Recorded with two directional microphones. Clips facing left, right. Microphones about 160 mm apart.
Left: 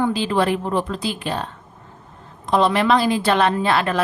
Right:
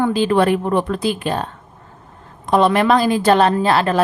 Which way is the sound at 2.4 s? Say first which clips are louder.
Right 3 dB; 55° right (ahead or behind).